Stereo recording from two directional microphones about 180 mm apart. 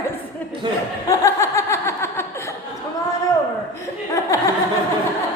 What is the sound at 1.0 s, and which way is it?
Snicker, 15° left (ahead or behind).